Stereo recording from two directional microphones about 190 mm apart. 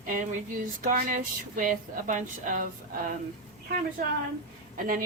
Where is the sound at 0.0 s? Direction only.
45° right (ahead or behind).